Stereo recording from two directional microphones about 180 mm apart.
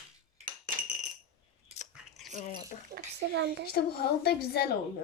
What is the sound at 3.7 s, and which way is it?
Speech, 60° left (ahead or behind).